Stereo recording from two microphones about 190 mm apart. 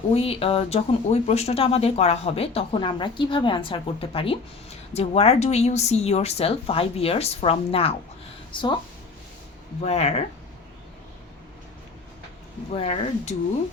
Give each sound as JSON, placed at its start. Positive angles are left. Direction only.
{"t": 0.1, "sound": "speech", "side_deg": 30}
{"t": 9.8, "sound": "speech", "side_deg": 35}
{"t": 12.7, "sound": "speech", "side_deg": 35}